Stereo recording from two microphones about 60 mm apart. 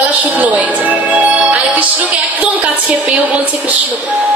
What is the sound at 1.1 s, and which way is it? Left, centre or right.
Music, right.